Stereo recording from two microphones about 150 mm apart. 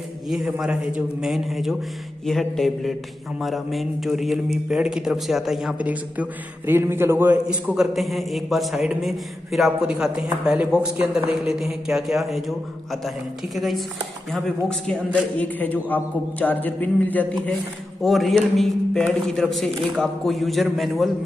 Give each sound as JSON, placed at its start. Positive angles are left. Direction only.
{"t": 0.3, "sound": "a man's voice", "side_deg": -5}
{"t": 18.0, "sound": "a man's voice", "side_deg": 0}